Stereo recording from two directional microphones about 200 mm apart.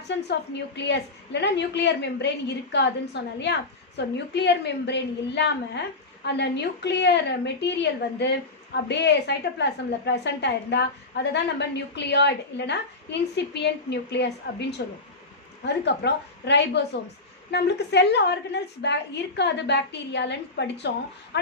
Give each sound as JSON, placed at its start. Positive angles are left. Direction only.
{"t": 0.1, "sound": "a woman's voice", "side_deg": 60}